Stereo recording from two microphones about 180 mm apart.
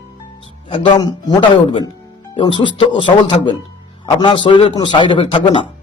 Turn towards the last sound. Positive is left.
turn(degrees=30)  # may be behind; listen again after turning